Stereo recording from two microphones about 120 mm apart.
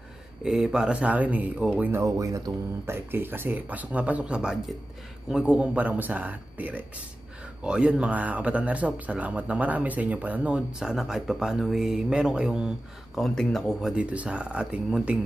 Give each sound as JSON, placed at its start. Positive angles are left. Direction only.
{"t": 0.4, "sound": "speech", "side_deg": -5}
{"t": 1.9, "sound": "speech", "side_deg": -25}
{"t": 3.1, "sound": "speech", "side_deg": -15}